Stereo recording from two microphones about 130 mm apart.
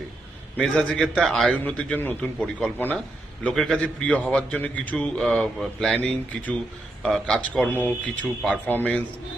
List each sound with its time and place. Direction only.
0.5 s a man's voice: 10° left (ahead or behind)